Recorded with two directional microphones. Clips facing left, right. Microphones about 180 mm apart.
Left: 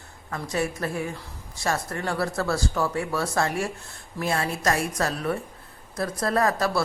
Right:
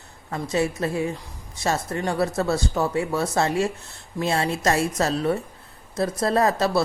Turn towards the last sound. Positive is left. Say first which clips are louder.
# right 3 dB
turn(degrees=-25)  # may be behind; listen again after turning